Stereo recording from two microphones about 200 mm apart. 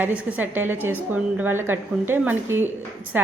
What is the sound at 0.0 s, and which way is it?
A woman's voice, 10° right (ahead or behind).